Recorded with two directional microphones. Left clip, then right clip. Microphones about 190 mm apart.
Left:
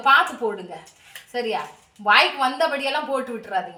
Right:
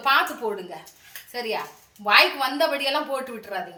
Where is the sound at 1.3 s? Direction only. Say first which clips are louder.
Left 3 dB; 15° right (ahead or behind).